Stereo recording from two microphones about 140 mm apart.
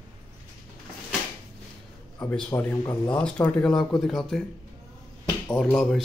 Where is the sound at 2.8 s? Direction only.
30° left (ahead or behind).